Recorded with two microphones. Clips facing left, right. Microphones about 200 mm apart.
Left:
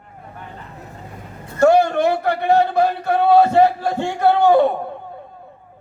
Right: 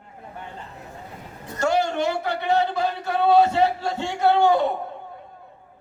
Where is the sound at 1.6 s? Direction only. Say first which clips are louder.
Left 8 dB; 55° left (ahead or behind).